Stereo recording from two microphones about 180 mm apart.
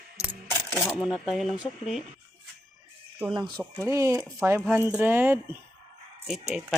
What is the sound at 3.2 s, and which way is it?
Speech, 25° right (ahead or behind).